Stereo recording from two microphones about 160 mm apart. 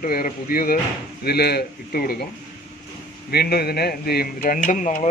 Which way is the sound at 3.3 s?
75° left (ahead or behind).